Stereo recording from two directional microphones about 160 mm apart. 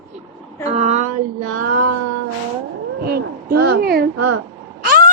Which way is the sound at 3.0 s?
75° right (ahead or behind).